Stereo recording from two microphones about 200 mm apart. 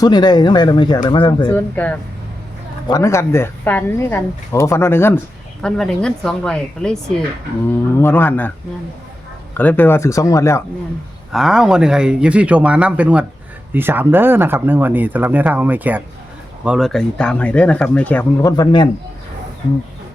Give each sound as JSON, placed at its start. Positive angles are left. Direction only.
{"t": 0.0, "sound": "speech", "side_deg": 20}
{"t": 1.5, "sound": "speech", "side_deg": 10}
{"t": 9.6, "sound": "speech", "side_deg": 10}
{"t": 11.3, "sound": "speech", "side_deg": 0}
{"t": 18.5, "sound": "speech", "side_deg": 20}